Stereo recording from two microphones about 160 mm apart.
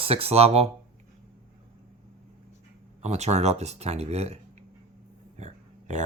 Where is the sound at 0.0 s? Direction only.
40° right (ahead or behind).